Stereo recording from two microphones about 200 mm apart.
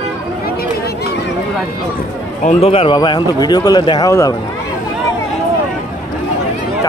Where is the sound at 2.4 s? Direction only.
35° left (ahead or behind); by 4.3 s 15° left (ahead or behind).